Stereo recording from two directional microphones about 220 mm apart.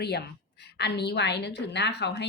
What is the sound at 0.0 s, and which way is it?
A woman's voice, 50° left (ahead or behind).